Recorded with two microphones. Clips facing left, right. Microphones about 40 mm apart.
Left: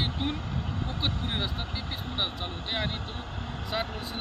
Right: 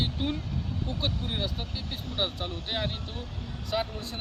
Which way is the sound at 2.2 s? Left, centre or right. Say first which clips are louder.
Right 2 dB; centre.